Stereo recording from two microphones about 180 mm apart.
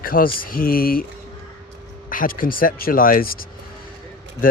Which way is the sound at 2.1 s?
50° left (ahead or behind).